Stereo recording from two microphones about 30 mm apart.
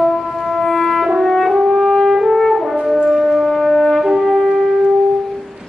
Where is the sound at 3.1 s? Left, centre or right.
Centre.